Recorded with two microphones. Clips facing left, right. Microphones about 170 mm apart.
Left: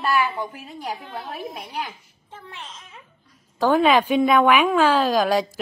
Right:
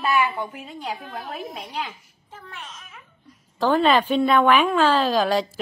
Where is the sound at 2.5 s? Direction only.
30° left (ahead or behind).